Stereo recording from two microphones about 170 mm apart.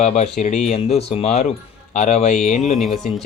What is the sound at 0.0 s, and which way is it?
Speech, 40° left (ahead or behind).